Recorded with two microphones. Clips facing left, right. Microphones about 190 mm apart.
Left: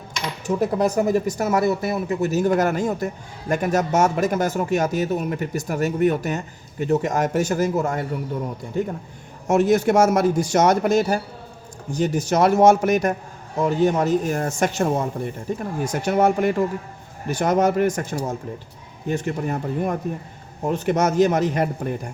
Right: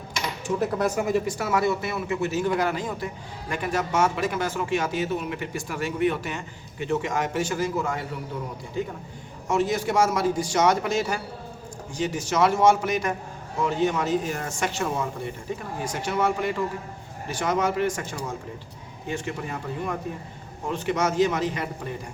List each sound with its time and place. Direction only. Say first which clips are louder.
0.4 s speech: left 4 dB; 40° left (ahead or behind)
9.5 s speech: left 7 dB; 50° left (ahead or behind)